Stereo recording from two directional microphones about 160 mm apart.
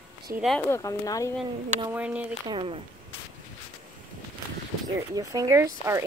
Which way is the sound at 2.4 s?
30° right (ahead or behind).